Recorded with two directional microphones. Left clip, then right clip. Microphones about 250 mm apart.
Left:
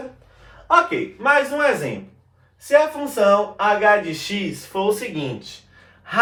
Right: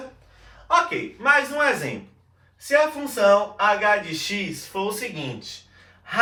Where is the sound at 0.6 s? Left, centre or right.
Centre.